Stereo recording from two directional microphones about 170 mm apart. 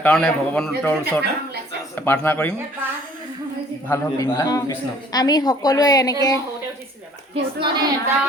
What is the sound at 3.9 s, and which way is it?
Speech, 15° left (ahead or behind).